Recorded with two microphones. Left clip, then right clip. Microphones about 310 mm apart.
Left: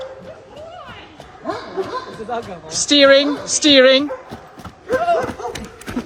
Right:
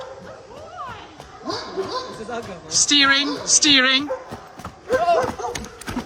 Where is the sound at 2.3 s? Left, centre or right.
Centre.